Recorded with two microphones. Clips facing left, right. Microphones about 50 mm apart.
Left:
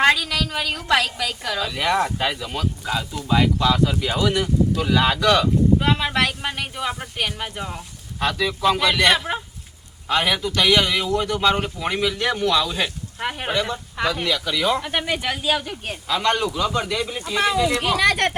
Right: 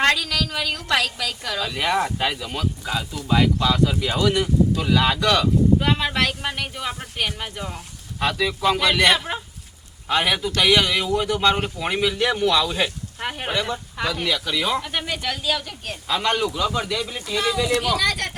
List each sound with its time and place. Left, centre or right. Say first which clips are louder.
0.0 s speech: left 2 dB; centre
14.3 s speech: even; centre
14.8 s speech: left 3 dB; centre
16.0 s speech: left 1 dB; centre
17.7 s speech: left 3 dB; left